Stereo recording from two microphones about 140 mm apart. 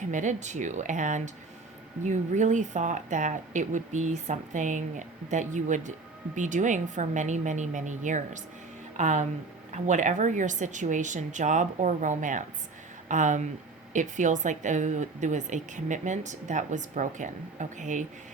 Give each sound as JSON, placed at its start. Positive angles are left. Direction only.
{"t": 0.1, "sound": "a woman's voice", "side_deg": -60}